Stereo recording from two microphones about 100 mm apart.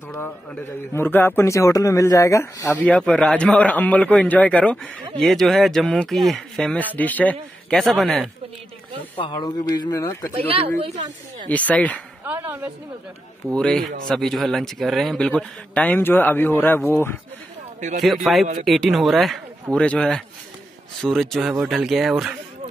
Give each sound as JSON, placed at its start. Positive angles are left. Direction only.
{"t": 0.9, "sound": "a man's voice", "side_deg": 20}
{"t": 2.8, "sound": "speech", "side_deg": 10}
{"t": 5.2, "sound": "speech", "side_deg": 0}
{"t": 6.7, "sound": "speech", "side_deg": 15}
{"t": 7.7, "sound": "speech", "side_deg": 5}
{"t": 9.1, "sound": "speech", "side_deg": 45}
{"t": 11.4, "sound": "speech", "side_deg": 15}
{"t": 12.4, "sound": "speech", "side_deg": -20}
{"t": 13.5, "sound": "speech", "side_deg": 10}
{"t": 18.0, "sound": "speech", "side_deg": 0}